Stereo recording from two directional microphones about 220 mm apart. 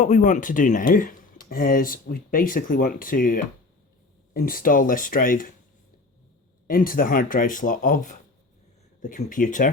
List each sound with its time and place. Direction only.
0.0 s speech: 35° left (ahead or behind)
6.7 s speech: 40° left (ahead or behind)